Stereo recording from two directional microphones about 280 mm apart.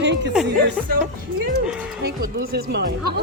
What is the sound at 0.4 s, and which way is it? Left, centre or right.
Music, centre.